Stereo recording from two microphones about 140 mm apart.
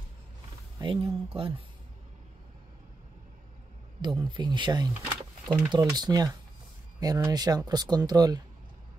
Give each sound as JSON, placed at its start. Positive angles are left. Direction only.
{"t": 0.8, "sound": "speech", "side_deg": -40}
{"t": 4.0, "sound": "speech", "side_deg": -35}